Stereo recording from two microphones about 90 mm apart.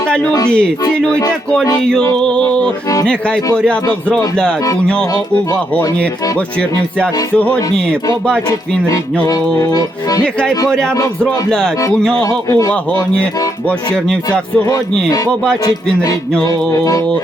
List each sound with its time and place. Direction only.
0.5 s music: 10° left (ahead or behind)
2.2 s music: 10° left (ahead or behind)
6.6 s music: 15° left (ahead or behind)
9.6 s accordion: 45° left (ahead or behind)
10.7 s music: 5° left (ahead or behind)
12.2 s accordion: 45° left (ahead or behind)
13.7 s music: 10° left (ahead or behind)
14.7 s speech: 40° left (ahead or behind)
16.4 s speech: 40° left (ahead or behind)